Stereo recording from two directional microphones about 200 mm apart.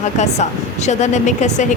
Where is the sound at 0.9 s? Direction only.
35° left (ahead or behind).